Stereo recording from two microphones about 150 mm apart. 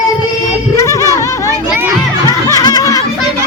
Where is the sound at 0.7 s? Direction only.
20° left (ahead or behind).